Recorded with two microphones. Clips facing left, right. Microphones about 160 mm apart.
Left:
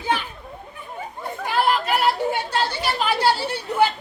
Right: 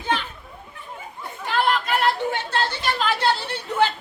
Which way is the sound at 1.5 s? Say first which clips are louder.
Left 1 dB; 5° left (ahead or behind).